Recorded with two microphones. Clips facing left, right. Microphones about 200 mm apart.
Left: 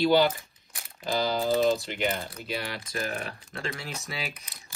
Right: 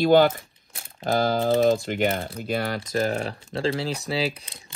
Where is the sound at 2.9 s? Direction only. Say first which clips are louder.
Right 8 dB; 30° right (ahead or behind).